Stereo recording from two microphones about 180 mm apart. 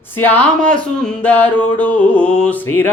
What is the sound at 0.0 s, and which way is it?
Speech, 10° left (ahead or behind).